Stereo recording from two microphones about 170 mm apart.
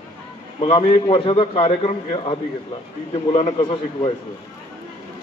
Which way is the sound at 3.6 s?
30° left (ahead or behind).